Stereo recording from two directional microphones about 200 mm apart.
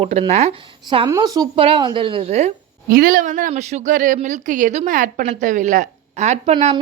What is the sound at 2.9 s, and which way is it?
A woman's voice, 45° right (ahead or behind).